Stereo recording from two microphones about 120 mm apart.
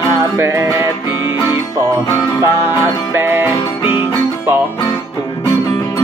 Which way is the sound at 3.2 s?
20° right (ahead or behind).